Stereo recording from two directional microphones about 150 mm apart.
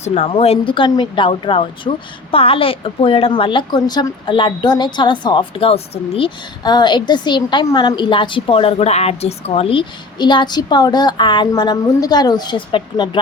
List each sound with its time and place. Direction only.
0.0 s a woman's voice: 45° left (ahead or behind)